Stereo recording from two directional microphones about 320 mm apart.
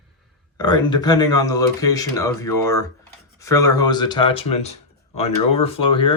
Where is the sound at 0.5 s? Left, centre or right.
Centre.